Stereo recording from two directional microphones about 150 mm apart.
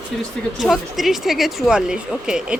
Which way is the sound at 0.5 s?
Centre (ahead or behind).